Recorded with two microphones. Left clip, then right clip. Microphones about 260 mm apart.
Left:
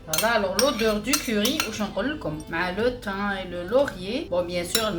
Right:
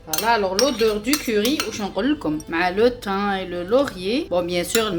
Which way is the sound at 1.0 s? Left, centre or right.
Right.